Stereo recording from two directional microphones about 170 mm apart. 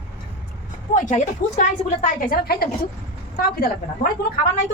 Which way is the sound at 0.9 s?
45° left (ahead or behind).